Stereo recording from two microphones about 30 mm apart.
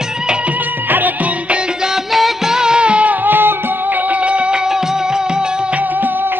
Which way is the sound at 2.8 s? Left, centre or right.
Right.